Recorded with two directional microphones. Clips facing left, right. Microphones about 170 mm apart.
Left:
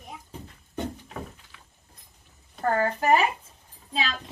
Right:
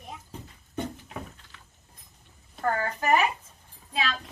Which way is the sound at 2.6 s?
35° left (ahead or behind).